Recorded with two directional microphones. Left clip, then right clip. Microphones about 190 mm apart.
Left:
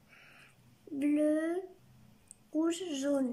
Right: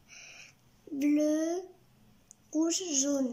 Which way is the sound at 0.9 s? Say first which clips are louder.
Right 2 dB; 20° right (ahead or behind).